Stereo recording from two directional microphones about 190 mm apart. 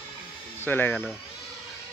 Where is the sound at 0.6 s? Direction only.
10° left (ahead or behind).